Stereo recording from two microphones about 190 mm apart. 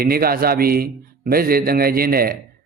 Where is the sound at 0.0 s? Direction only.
50° right (ahead or behind).